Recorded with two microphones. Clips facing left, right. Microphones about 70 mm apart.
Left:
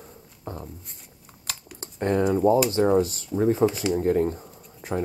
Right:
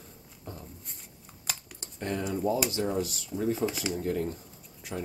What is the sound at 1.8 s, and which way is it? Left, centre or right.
Speech, left.